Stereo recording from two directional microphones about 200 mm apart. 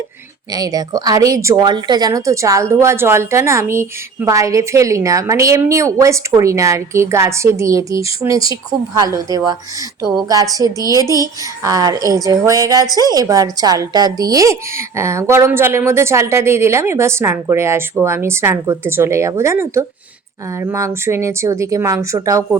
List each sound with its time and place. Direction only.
0.5 s speech: 20° right (ahead or behind)